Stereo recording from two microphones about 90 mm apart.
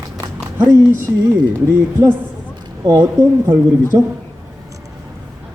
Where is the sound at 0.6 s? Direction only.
30° right (ahead or behind).